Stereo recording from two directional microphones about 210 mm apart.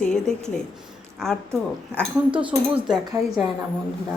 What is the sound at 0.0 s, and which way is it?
A woman's voice, 5° left (ahead or behind).